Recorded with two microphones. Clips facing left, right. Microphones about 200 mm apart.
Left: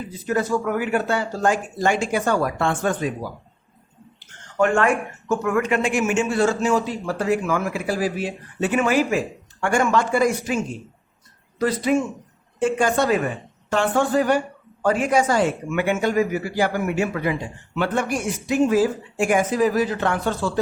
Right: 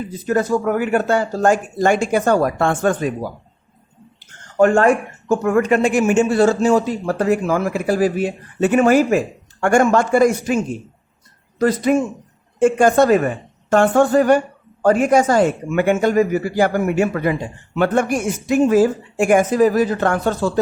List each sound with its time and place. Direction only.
0.3 s a man's voice: 45° right (ahead or behind)
4.5 s a man's voice: 40° right (ahead or behind)
11.6 s a man's voice: 45° right (ahead or behind)